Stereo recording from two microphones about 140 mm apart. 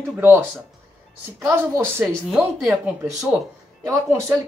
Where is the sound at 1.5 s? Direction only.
15° right (ahead or behind).